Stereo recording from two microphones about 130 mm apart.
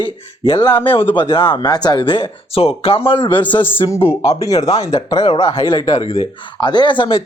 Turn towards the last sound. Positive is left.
turn(degrees=40)  # may be behind; listen again after turning